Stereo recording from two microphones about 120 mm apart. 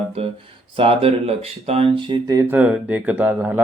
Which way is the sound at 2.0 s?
45° right (ahead or behind).